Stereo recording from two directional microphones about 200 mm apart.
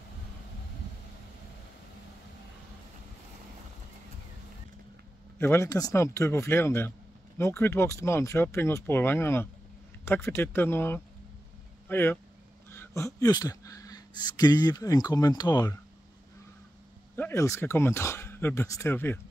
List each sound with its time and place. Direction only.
5.4 s speech: 10° left (ahead or behind)
17.1 s speech: 10° left (ahead or behind)